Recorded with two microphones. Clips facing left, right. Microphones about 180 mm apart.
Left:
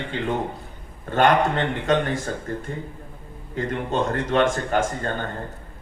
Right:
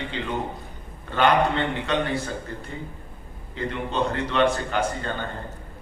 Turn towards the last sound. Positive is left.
turn(degrees=45)  # may be behind; listen again after turning